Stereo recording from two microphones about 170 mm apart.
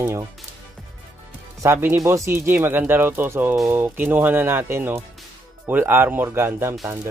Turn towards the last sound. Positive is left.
turn(degrees=-15)  # may be behind; listen again after turning